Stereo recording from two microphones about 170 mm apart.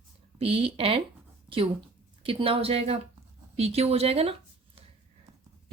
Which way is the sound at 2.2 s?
30° right (ahead or behind).